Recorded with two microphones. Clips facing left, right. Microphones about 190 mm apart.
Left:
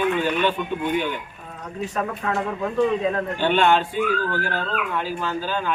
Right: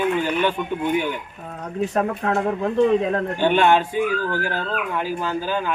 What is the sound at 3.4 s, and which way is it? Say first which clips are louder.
A man's voice: right 2 dB; 15° right (ahead or behind).